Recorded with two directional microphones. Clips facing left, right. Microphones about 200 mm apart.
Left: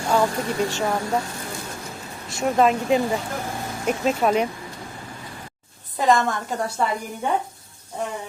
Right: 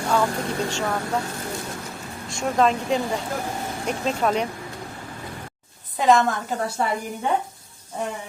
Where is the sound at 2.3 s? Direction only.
5° left (ahead or behind).